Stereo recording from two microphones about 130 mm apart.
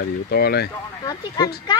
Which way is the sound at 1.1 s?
30° left (ahead or behind).